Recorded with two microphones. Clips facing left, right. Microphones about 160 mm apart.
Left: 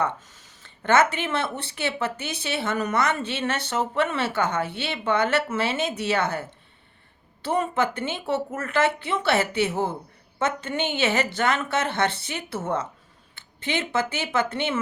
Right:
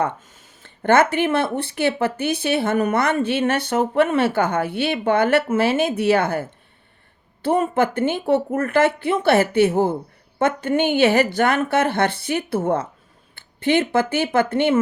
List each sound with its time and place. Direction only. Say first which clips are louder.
0.0 s speech: right 3 dB; 50° right (ahead or behind)
7.4 s speech: right 5 dB; 55° right (ahead or behind)